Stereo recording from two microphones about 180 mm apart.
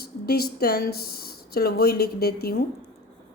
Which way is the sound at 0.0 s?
60° left (ahead or behind).